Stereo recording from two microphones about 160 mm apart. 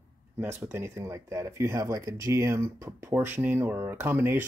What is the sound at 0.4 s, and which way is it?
Speech, 15° right (ahead or behind).